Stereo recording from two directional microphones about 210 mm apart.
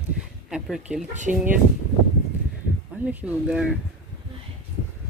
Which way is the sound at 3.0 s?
5° right (ahead or behind).